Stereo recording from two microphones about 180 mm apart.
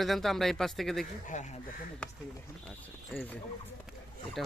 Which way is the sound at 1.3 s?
40° left (ahead or behind).